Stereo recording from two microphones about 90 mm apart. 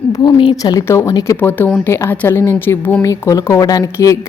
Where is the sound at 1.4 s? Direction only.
20° left (ahead or behind).